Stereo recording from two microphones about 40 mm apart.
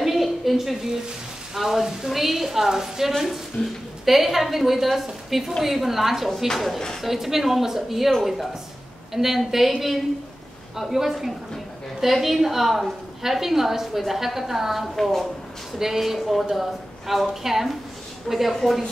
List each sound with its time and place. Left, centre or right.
0.0 s a sound: centre
1.5 s a woman's voice: centre
3.6 s a woman's voice: left
4.0 s a woman's voice: centre
15.8 s a woman's voice: centre